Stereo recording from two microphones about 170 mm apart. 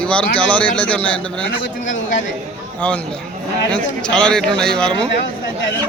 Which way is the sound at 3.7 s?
5° left (ahead or behind).